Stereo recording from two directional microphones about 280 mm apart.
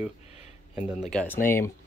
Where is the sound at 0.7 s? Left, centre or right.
Centre.